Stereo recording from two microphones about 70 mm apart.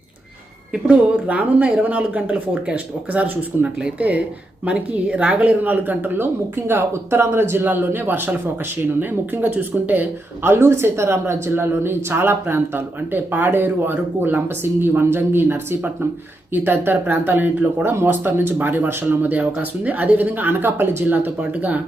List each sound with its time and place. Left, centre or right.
0.9 s speech: centre